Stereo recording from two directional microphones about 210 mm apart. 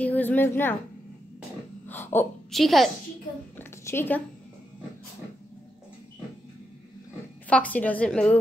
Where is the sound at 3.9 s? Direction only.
10° left (ahead or behind).